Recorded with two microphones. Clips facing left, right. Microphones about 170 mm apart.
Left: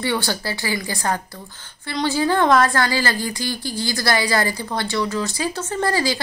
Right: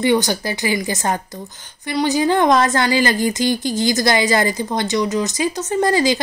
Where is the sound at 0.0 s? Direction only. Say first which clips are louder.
Right 6 dB; 20° right (ahead or behind).